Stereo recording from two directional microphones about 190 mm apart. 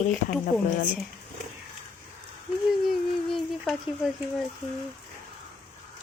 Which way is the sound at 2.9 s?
Centre (ahead or behind).